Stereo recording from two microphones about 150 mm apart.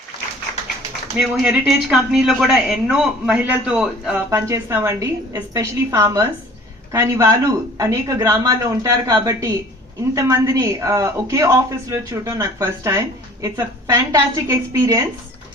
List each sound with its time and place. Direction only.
1.1 s a man's voice: 5° right (ahead or behind)
4.3 s speech: 20° right (ahead or behind)